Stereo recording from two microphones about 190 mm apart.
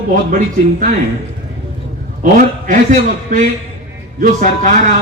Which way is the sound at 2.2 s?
40° right (ahead or behind).